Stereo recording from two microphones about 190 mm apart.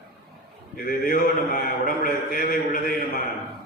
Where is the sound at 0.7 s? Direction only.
50° left (ahead or behind).